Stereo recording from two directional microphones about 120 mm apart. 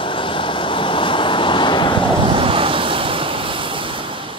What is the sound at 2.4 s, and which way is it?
Waves, 45° right (ahead or behind).